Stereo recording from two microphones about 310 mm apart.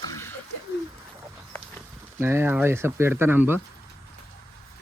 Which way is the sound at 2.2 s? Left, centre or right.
Centre.